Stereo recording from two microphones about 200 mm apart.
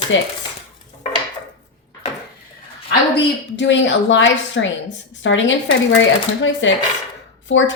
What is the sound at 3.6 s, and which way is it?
A woman's voice, 65° left (ahead or behind).